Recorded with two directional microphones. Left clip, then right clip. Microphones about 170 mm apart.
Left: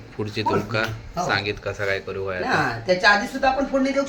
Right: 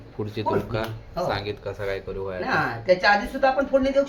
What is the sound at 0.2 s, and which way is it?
Speech, 15° right (ahead or behind).